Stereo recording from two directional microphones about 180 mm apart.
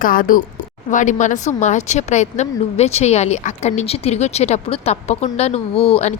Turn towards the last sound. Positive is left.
turn(degrees=35)  # may be behind; listen again after turning